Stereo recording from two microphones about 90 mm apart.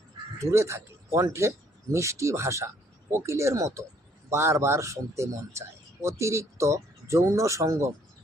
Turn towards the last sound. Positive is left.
turn(degrees=-35)  # may be behind; listen again after turning